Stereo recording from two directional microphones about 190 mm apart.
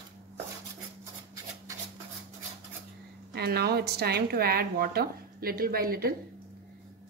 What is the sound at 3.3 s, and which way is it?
A woman's voice, 55° right (ahead or behind).